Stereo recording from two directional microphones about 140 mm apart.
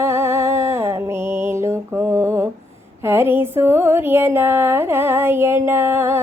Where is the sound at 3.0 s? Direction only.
15° right (ahead or behind).